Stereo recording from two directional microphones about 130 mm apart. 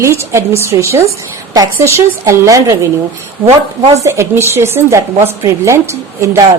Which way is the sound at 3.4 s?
50° right (ahead or behind).